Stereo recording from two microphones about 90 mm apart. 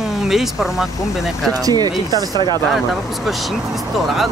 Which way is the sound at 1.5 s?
45° right (ahead or behind).